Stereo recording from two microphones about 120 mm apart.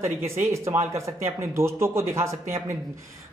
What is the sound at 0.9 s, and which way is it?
A man's voice, 25° right (ahead or behind).